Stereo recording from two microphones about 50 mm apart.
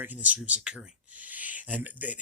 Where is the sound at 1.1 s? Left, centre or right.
Right.